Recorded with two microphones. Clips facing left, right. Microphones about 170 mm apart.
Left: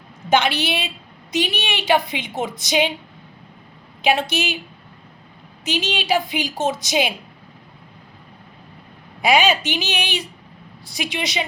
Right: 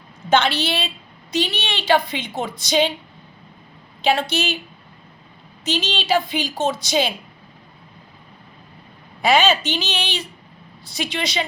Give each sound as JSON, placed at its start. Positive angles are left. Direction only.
{"t": 0.3, "sound": "a woman's voice", "side_deg": 15}
{"t": 4.0, "sound": "a woman's voice", "side_deg": 15}
{"t": 5.6, "sound": "a woman's voice", "side_deg": 10}
{"t": 9.2, "sound": "a woman's voice", "side_deg": 15}